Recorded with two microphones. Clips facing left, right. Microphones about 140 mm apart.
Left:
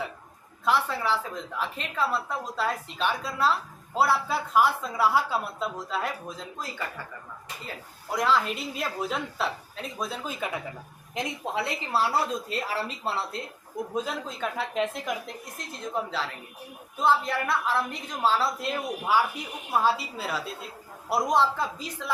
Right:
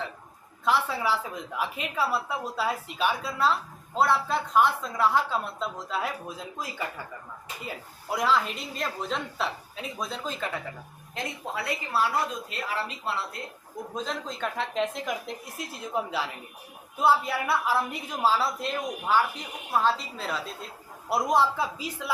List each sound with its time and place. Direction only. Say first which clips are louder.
0.6 s a woman's voice: even; centre (ahead or behind)
8.1 s a woman's voice: left 1 dB; centre (ahead or behind); by 13.4 s 35° left (ahead or behind)
13.9 s a woman's voice: left 1 dB; 10° left (ahead or behind)